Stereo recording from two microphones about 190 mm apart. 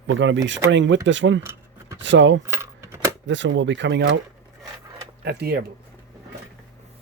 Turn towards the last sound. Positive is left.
turn(degrees=-60)  # may be behind; listen again after turning